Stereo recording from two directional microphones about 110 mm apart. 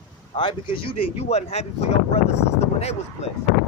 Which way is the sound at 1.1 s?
75° left (ahead or behind).